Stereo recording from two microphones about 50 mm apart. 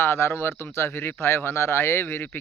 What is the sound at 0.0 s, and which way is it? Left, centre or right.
Speech, left.